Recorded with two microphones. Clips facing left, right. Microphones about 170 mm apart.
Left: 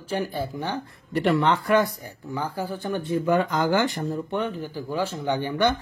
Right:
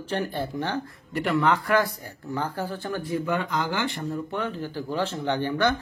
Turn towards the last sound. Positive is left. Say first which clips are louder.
# left 1 dB
turn(degrees=10)  # may be behind; listen again after turning